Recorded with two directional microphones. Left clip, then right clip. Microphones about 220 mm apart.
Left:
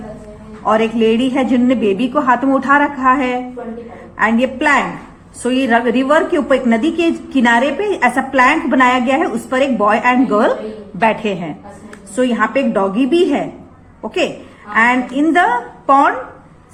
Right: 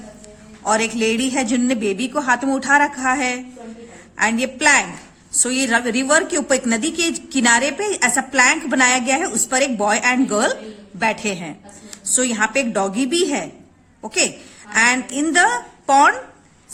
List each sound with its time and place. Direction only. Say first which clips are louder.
0.6 s a woman's voice: left 5 dB; 40° right (ahead or behind)